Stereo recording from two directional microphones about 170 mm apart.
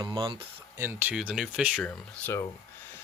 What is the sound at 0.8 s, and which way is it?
Speech, 15° right (ahead or behind).